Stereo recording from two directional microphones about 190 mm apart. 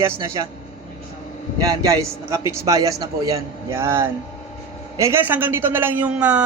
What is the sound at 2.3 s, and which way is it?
Speech, 15° right (ahead or behind).